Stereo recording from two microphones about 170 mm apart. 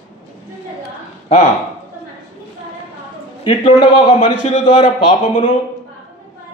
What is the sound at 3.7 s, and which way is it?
A man's voice, 30° left (ahead or behind).